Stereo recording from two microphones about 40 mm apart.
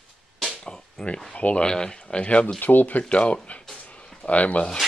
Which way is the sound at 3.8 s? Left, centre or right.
Left.